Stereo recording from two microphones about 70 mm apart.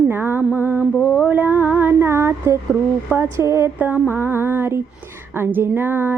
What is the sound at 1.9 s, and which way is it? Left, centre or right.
Female singing, right.